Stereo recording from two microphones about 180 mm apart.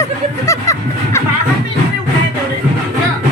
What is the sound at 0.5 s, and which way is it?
Music, 15° left (ahead or behind).